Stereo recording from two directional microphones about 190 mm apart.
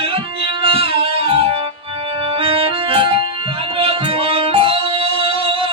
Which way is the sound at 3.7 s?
30° right (ahead or behind).